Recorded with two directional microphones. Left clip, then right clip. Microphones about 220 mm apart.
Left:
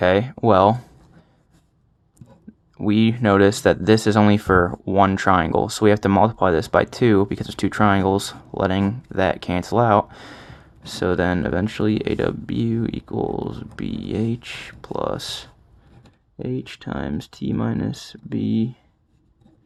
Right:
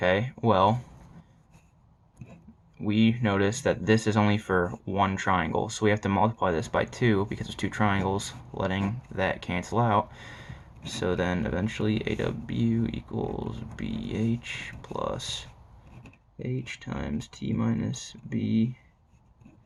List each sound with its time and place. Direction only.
0.0 s speech: 45° left (ahead or behind)
2.7 s speech: 45° left (ahead or behind)